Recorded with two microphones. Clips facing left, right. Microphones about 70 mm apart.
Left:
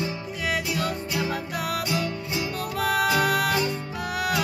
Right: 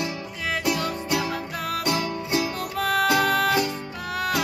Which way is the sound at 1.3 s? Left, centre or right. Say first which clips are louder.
Even; centre.